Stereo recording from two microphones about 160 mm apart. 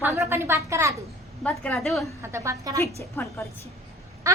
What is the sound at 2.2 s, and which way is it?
Speech, 15° right (ahead or behind).